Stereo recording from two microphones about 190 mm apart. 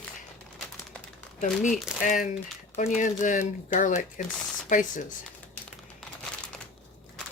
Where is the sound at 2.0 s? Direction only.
45° left (ahead or behind).